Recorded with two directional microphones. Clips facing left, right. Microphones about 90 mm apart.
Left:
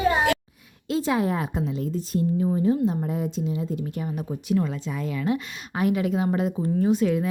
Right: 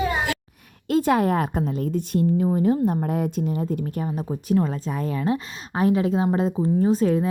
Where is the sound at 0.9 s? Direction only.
55° right (ahead or behind).